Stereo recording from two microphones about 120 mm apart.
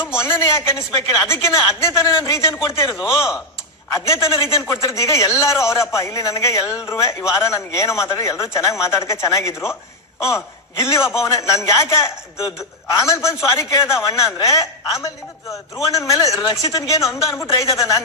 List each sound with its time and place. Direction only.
0.2 s a man's voice: 20° left (ahead or behind)